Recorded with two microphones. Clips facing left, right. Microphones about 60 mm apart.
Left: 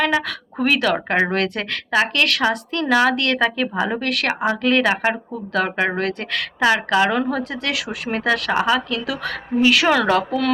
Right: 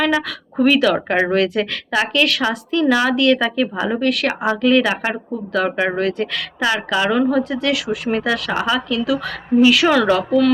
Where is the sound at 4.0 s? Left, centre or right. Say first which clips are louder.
Right 4 dB; left.